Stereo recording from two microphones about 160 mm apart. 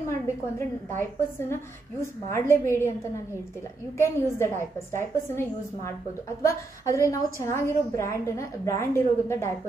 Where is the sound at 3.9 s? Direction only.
15° left (ahead or behind).